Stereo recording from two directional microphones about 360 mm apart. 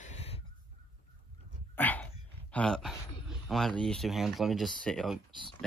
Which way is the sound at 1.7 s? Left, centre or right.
Centre.